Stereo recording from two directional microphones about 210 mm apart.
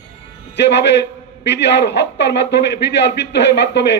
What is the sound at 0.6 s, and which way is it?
A man's voice, 55° left (ahead or behind).